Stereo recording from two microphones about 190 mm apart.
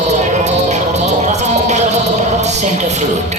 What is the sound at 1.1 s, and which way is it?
Music, 35° right (ahead or behind).